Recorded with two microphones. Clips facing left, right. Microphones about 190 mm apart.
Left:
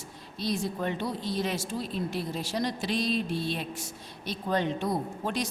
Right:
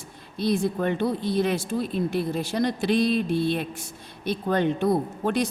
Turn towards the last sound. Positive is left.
turn(degrees=-55)  # may be behind; listen again after turning